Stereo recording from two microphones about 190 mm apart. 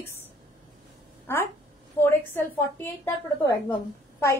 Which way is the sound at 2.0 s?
10° left (ahead or behind).